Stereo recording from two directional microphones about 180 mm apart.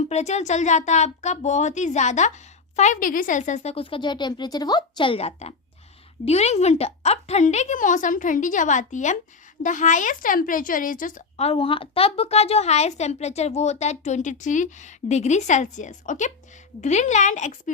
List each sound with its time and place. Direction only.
0.1 s a woman's voice: 40° left (ahead or behind)